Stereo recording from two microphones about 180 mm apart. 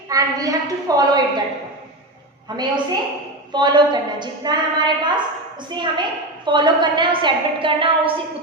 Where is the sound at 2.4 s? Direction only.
25° right (ahead or behind).